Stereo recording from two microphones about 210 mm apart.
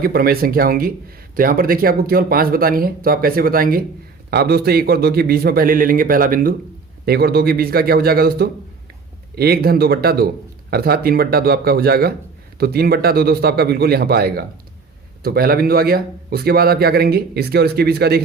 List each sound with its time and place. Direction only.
0.0 s a man's voice: 45° right (ahead or behind)